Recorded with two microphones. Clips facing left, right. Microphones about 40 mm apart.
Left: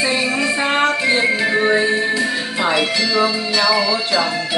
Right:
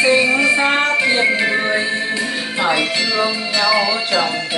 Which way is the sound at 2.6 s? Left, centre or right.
Centre.